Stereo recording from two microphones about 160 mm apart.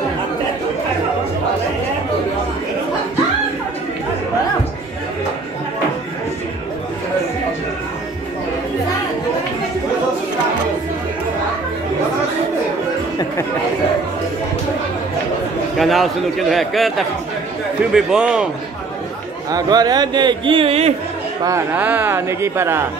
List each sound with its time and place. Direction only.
15.8 s a man's voice: centre (ahead or behind)
19.5 s a man's voice: 25° right (ahead or behind)
21.5 s speech: 15° right (ahead or behind)